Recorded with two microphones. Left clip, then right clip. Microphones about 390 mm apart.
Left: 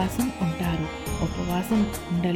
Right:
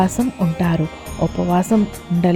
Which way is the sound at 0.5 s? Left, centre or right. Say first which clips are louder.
Right 8 dB; centre.